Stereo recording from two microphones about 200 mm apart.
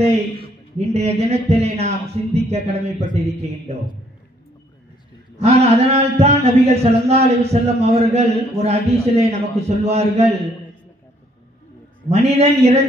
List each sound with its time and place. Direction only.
0.7 s a man's voice: 30° right (ahead or behind)
5.4 s a man's voice: 30° right (ahead or behind)
12.1 s a man's voice: 30° right (ahead or behind)